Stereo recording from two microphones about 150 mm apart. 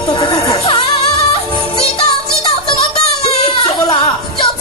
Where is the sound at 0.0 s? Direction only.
30° left (ahead or behind).